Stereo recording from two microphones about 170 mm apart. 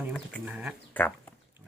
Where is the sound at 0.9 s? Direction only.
10° left (ahead or behind).